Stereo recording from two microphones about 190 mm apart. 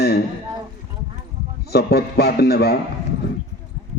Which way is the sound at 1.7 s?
55° left (ahead or behind).